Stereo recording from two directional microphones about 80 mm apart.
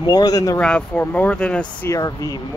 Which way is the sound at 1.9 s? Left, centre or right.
Left.